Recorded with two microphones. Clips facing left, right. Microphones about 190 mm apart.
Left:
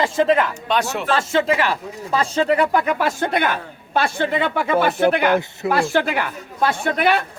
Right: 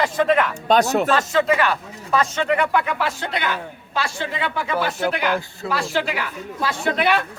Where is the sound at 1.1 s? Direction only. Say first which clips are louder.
Even; 25° left (ahead or behind); by 7.1 s 50° left (ahead or behind).